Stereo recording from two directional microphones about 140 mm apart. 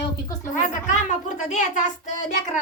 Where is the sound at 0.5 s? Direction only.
65° left (ahead or behind).